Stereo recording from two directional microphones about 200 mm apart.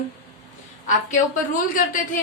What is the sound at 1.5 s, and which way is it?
Speech, 40° left (ahead or behind).